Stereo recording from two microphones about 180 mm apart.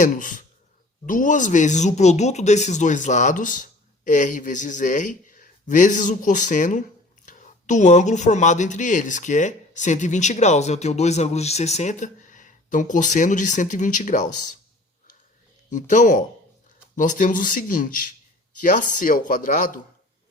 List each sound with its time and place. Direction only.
0.0 s speech: 50° left (ahead or behind)
15.7 s speech: 45° left (ahead or behind)